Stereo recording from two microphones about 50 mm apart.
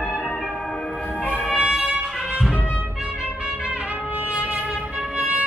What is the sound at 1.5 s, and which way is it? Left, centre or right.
Music, centre.